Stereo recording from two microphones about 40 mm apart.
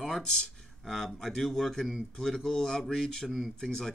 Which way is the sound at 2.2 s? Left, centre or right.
Centre.